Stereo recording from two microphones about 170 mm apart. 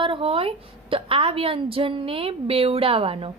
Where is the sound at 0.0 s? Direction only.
30° right (ahead or behind).